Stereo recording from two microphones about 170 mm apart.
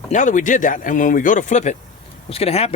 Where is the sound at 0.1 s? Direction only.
45° left (ahead or behind).